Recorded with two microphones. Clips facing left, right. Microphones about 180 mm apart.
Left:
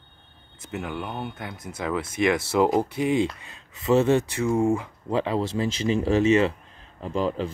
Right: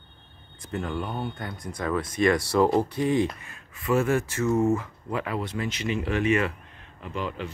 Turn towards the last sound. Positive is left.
turn(degrees=35)  # may be behind; listen again after turning